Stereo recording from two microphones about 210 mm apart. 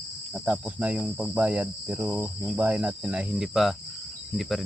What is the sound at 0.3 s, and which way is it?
Cricket, 5° right (ahead or behind).